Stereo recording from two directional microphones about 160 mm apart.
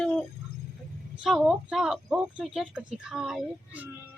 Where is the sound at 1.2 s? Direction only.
5° right (ahead or behind).